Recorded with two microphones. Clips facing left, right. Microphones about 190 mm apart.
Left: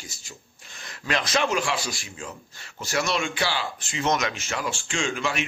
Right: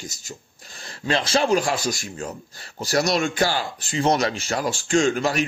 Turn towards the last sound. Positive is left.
turn(degrees=-40)  # may be behind; listen again after turning